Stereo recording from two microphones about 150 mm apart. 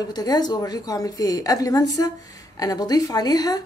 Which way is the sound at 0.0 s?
25° left (ahead or behind).